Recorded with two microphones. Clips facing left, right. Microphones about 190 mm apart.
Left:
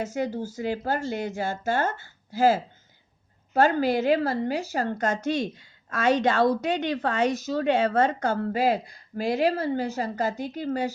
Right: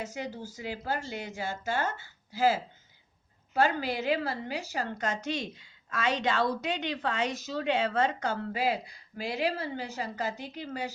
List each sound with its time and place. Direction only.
0.0 s a woman's voice: 50° left (ahead or behind)